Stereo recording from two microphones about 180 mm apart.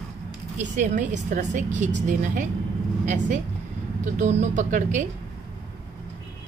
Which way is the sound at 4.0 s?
40° right (ahead or behind).